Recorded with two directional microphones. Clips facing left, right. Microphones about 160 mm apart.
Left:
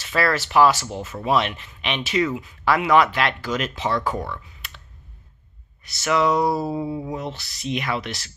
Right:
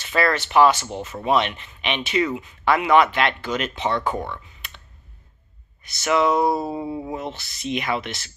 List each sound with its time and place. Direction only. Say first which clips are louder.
0.0 s speech: right 1 dB; centre (ahead or behind)
5.9 s speech: right 1 dB; centre (ahead or behind)